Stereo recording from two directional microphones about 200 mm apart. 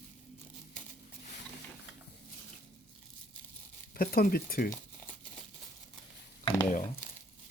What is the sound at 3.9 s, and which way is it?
Speech, 50° left (ahead or behind).